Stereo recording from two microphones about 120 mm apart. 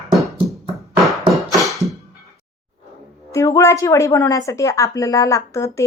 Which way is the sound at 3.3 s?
25° left (ahead or behind).